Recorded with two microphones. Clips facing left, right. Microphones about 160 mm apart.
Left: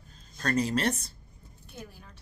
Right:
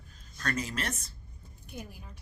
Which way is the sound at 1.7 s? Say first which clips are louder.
Right 2 dB; 15° right (ahead or behind).